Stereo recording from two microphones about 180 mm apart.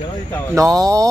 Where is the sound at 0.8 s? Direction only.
20° right (ahead or behind).